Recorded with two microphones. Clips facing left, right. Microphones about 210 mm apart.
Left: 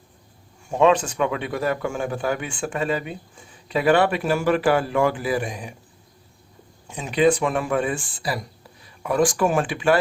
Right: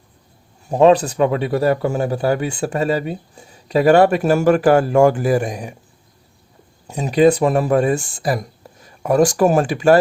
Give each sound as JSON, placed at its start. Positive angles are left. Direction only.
{"t": 0.7, "sound": "a man's voice", "side_deg": -40}
{"t": 6.8, "sound": "a man's voice", "side_deg": -40}